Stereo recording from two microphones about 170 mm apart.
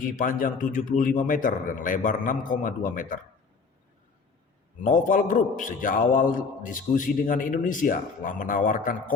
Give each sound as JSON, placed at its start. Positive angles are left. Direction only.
{"t": 0.0, "sound": "a man's voice", "side_deg": 55}
{"t": 4.8, "sound": "a man's voice", "side_deg": 50}